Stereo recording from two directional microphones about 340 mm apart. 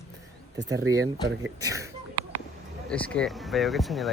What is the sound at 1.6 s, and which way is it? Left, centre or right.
Speech, centre.